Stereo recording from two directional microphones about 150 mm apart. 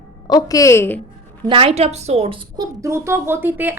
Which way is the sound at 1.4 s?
35° right (ahead or behind).